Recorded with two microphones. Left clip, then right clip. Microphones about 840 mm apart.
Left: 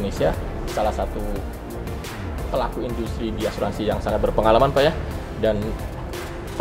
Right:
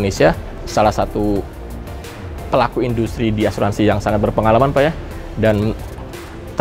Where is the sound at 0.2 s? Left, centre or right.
Right.